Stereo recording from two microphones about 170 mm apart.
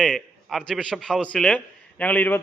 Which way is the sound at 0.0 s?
Centre (ahead or behind).